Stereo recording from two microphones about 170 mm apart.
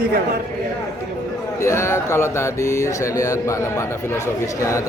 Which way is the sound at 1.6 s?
15° left (ahead or behind).